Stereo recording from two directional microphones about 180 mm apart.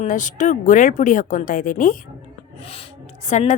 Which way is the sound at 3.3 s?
40° left (ahead or behind).